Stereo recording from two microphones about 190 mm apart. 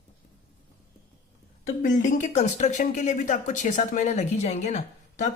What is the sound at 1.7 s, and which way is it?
Speech, 40° left (ahead or behind).